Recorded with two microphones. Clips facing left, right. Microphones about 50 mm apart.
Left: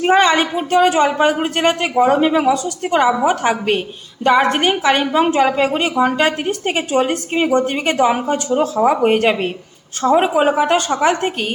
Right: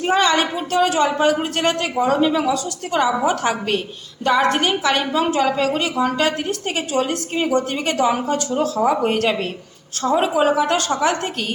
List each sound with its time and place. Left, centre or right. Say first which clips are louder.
0.0 s a woman's voice: left 4 dB; left